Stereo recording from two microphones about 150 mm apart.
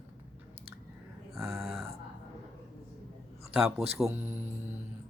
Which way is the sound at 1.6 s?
Centre (ahead or behind).